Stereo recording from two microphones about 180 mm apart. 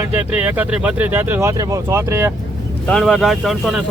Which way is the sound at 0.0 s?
10° right (ahead or behind).